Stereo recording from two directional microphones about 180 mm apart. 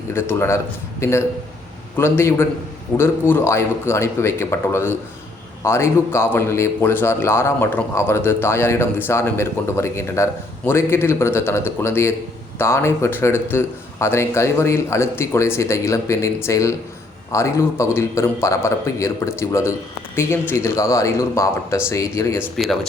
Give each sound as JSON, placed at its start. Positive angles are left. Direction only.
{"t": 0.1, "sound": "speech", "side_deg": 15}
{"t": 22.5, "sound": "speech", "side_deg": 0}